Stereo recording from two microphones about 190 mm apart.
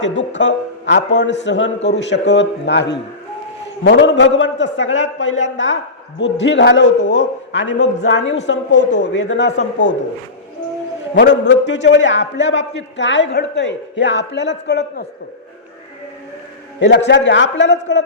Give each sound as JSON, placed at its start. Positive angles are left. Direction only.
{"t": 0.0, "sound": "a man's voice", "side_deg": 75}
{"t": 11.1, "sound": "a man's voice", "side_deg": 70}
{"t": 16.8, "sound": "a man's voice", "side_deg": 65}